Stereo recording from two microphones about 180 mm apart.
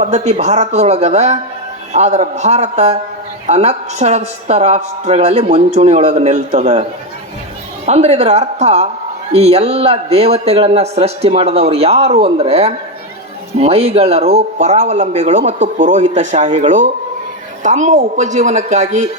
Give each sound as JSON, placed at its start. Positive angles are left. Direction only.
{"t": 0.0, "sound": "a woman's voice", "side_deg": -40}
{"t": 7.9, "sound": "a woman's voice", "side_deg": -35}